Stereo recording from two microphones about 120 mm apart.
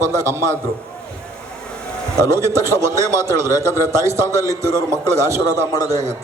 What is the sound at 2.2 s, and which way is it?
A man's voice, 25° right (ahead or behind).